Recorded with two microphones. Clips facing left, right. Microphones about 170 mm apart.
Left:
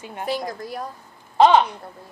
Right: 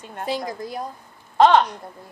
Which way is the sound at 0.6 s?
20° right (ahead or behind).